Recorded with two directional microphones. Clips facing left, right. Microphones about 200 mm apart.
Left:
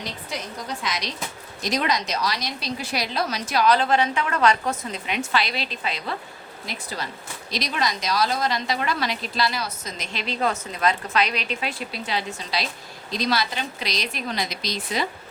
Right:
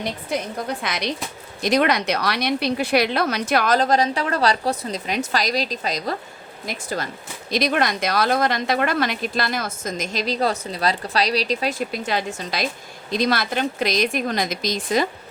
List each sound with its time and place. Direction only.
0.0 s a woman's voice: 55° right (ahead or behind)
3.8 s a woman's voice: 40° right (ahead or behind)
7.5 s a woman's voice: 55° right (ahead or behind)